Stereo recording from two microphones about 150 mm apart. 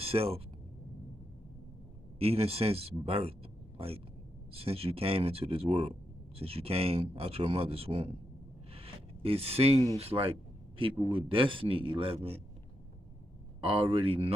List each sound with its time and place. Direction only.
0.0 s speech: 40° right (ahead or behind)
2.1 s speech: 40° right (ahead or behind)
8.7 s a sound: 40° right (ahead or behind)
9.9 s speech: 40° right (ahead or behind)
13.6 s speech: 35° right (ahead or behind)